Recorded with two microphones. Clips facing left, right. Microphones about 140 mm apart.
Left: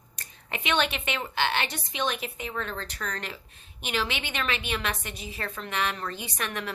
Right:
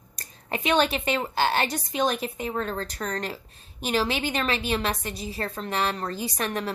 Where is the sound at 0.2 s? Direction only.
40° right (ahead or behind).